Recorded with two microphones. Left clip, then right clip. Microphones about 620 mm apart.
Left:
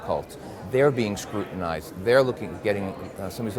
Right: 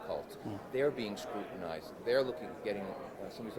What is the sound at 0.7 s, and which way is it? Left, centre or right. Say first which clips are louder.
Speech: left 13 dB; left.